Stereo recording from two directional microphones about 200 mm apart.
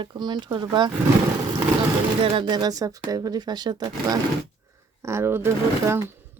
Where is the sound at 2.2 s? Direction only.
25° right (ahead or behind).